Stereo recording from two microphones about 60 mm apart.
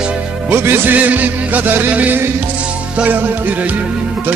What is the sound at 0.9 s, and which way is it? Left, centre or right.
Music, right.